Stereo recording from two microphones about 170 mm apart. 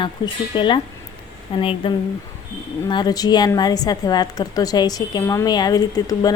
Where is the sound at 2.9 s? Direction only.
25° left (ahead or behind).